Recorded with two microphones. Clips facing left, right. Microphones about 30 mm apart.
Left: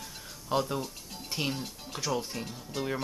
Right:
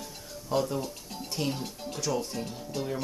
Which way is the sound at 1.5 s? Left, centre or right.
Centre.